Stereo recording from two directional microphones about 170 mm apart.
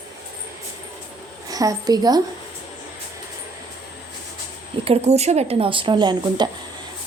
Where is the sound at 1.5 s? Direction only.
20° right (ahead or behind).